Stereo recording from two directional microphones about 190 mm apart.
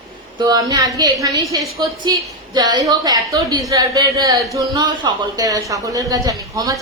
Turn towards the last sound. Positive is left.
turn(degrees=-20)  # may be behind; listen again after turning